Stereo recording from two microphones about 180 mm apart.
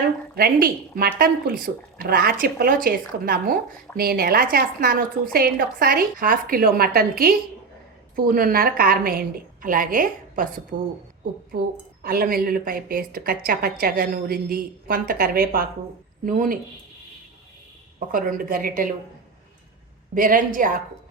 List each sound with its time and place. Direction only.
0.3 s a woman's voice: 55° right (ahead or behind)
12.0 s a woman's voice: 55° right (ahead or behind)
18.1 s a woman's voice: 50° right (ahead or behind)
20.1 s a woman's voice: 50° right (ahead or behind)